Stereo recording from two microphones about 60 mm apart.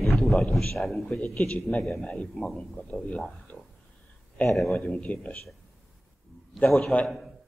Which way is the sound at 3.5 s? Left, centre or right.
Left.